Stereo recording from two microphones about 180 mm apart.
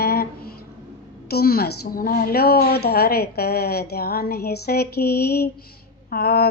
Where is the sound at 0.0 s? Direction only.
60° left (ahead or behind).